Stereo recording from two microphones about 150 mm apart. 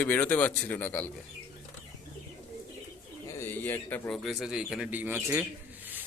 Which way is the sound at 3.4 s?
15° left (ahead or behind).